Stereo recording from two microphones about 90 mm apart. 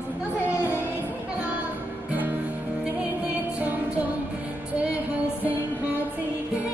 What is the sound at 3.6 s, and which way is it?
Music, 15° right (ahead or behind).